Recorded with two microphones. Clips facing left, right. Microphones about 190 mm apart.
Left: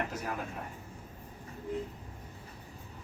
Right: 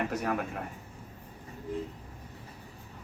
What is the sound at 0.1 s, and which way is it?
Speech, 70° right (ahead or behind).